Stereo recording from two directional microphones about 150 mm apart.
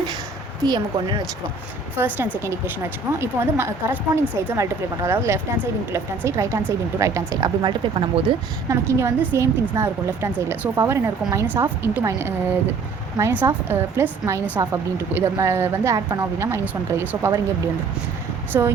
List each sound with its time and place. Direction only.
0.6 s speech: 30° right (ahead or behind)
2.0 s a woman's voice: 10° right (ahead or behind); by 8.2 s 35° right (ahead or behind)
8.7 s a woman's voice: 15° right (ahead or behind)
18.5 s a woman's voice: 20° right (ahead or behind)